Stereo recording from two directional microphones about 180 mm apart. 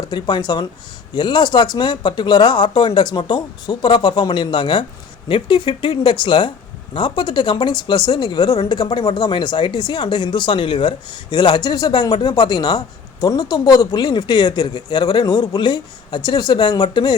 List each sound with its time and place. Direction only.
0.0 s speech: 25° left (ahead or behind)